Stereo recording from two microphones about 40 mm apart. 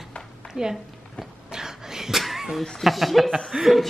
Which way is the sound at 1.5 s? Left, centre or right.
Centre.